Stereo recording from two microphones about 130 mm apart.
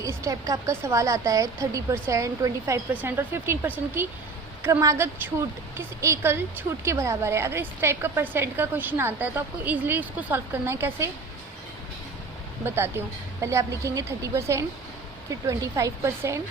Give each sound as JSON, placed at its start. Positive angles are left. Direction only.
{"t": 0.0, "sound": "a woman's voice", "side_deg": -25}
{"t": 12.6, "sound": "a woman's voice", "side_deg": -20}